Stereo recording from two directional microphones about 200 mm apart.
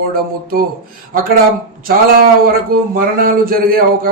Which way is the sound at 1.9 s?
45° right (ahead or behind).